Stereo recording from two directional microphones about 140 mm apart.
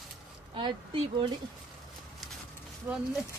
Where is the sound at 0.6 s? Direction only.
35° right (ahead or behind).